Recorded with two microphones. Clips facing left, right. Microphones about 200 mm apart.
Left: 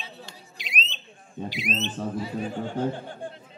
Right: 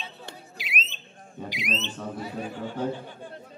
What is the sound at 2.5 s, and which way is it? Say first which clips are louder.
Speech: left 3 dB; 50° left (ahead or behind).